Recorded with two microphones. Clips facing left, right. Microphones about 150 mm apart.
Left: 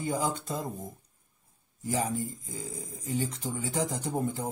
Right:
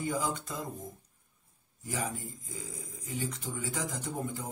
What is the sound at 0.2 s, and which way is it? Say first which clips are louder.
Speech: left 3 dB; 30° left (ahead or behind).